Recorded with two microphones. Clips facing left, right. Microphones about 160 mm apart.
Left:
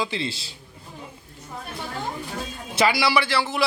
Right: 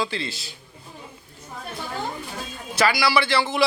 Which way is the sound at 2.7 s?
25° left (ahead or behind).